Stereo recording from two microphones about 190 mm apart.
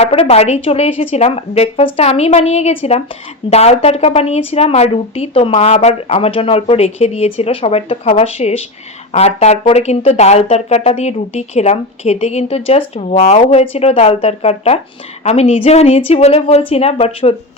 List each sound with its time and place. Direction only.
0.0 s speech: 30° left (ahead or behind)